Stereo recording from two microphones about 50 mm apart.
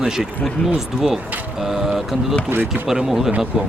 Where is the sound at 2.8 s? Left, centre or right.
Centre.